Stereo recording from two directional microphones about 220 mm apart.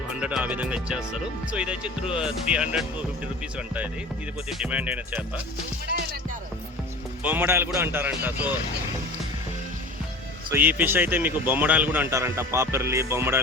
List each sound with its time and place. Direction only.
0.2 s speech: 5° right (ahead or behind)
4.4 s speech: 5° right (ahead or behind)
7.2 s speech: 10° right (ahead or behind)
10.5 s speech: 10° right (ahead or behind)